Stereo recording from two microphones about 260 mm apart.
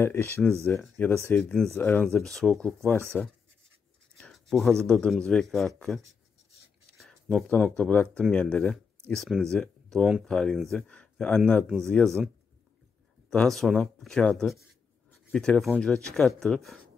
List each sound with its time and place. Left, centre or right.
0.0 s speech: centre
4.2 s writing: centre
4.8 s speech: centre
13.3 s speech: centre